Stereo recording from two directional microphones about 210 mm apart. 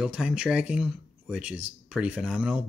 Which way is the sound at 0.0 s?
5° right (ahead or behind).